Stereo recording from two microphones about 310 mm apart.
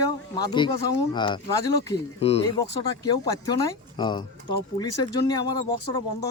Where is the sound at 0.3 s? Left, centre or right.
Centre.